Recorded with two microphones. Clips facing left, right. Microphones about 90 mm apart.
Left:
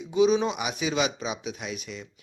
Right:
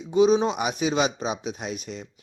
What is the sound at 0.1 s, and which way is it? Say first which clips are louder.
Speech: right 3 dB; 40° right (ahead or behind).